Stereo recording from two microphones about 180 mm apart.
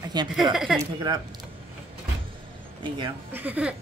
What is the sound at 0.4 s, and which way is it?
Speech, centre (ahead or behind).